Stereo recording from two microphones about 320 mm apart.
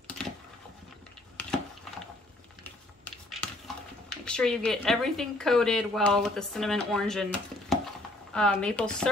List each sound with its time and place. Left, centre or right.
3.3 s a woman's voice: centre